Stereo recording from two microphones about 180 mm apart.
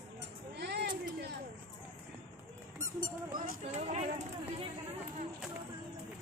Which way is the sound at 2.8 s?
20° right (ahead or behind).